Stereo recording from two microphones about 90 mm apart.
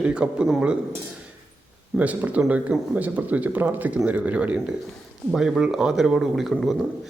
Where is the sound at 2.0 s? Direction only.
15° right (ahead or behind).